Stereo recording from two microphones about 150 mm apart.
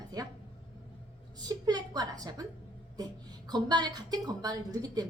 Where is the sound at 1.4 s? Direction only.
25° right (ahead or behind).